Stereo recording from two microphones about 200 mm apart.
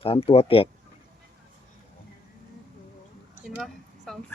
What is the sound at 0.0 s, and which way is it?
Speech, 30° left (ahead or behind).